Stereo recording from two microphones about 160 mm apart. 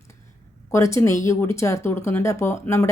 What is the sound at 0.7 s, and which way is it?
Speech, 20° left (ahead or behind).